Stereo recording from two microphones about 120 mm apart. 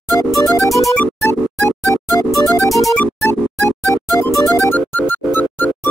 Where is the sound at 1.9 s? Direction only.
Centre (ahead or behind).